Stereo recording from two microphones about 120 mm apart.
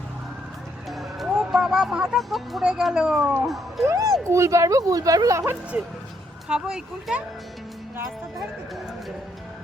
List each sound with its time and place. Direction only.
0.9 s speech: centre (ahead or behind)
3.8 s a woman's voice: 30° right (ahead or behind)
6.5 s speech: 5° right (ahead or behind)